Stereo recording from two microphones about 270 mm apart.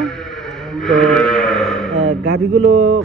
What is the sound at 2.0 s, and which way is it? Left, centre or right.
Speech, right.